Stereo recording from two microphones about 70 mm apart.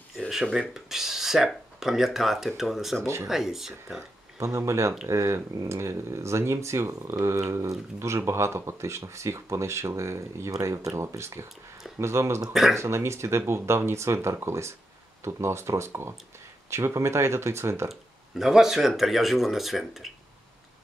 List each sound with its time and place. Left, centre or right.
0.6 s speech: centre
4.4 s speech: right
18.3 s speech: centre